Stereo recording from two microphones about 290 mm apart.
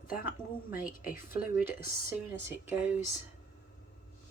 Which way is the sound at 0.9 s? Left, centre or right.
Left.